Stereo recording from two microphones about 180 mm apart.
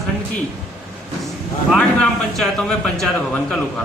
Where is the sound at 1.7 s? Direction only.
5° left (ahead or behind).